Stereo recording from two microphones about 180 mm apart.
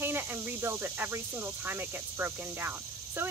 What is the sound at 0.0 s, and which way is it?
Speech, 10° right (ahead or behind).